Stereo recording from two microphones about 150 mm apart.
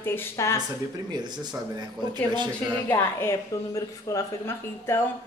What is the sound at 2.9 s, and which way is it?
A woman's voice, 15° left (ahead or behind).